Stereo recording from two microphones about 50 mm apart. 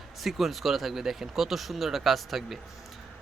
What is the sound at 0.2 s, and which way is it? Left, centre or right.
Speech, centre.